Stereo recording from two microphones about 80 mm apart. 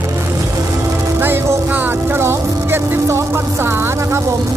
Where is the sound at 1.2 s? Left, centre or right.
Right.